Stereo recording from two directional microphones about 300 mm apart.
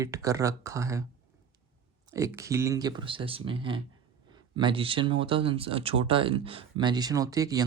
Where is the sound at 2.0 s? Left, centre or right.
Centre.